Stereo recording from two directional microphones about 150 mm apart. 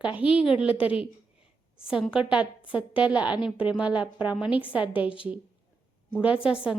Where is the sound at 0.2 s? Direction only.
40° left (ahead or behind).